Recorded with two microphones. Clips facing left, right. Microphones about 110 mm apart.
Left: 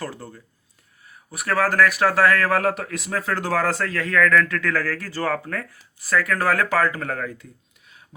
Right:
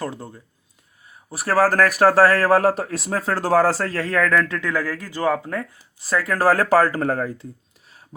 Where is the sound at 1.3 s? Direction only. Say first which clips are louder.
Right 4 dB; 30° right (ahead or behind).